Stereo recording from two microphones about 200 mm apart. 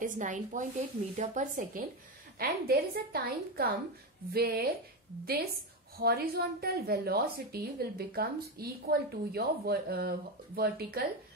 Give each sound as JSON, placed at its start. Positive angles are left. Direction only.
{"t": 0.0, "sound": "a woman's voice", "side_deg": -40}